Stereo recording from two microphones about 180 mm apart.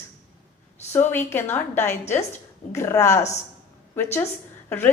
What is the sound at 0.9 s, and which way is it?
A woman's voice, 10° left (ahead or behind).